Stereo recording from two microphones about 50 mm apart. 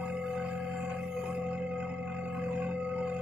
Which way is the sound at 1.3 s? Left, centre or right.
Right.